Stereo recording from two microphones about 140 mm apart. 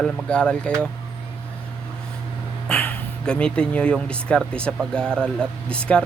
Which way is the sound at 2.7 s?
10° left (ahead or behind).